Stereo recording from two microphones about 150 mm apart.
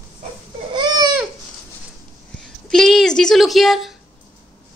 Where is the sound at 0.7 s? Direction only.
30° right (ahead or behind).